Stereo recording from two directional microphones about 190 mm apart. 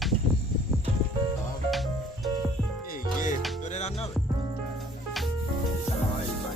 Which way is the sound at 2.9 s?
45° left (ahead or behind).